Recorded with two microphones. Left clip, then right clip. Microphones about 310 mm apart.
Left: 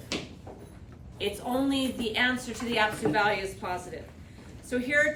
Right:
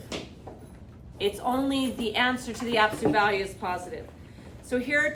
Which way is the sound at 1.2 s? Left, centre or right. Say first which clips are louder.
Right 3 dB; centre.